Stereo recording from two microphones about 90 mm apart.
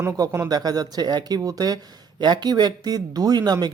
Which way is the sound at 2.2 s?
55° right (ahead or behind).